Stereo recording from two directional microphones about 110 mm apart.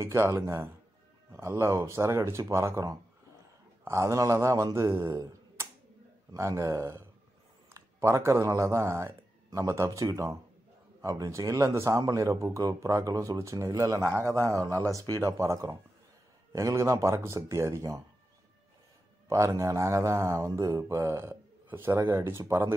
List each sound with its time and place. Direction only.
0.0 s a man's voice: 25° right (ahead or behind)
19.2 s a man's voice: 25° right (ahead or behind)